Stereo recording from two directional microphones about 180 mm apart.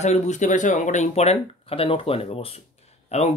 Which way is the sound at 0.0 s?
40° left (ahead or behind).